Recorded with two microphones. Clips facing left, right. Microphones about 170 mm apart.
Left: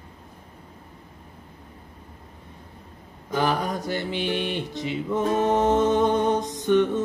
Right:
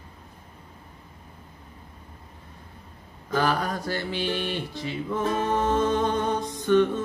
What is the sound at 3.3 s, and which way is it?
Music, 20° left (ahead or behind).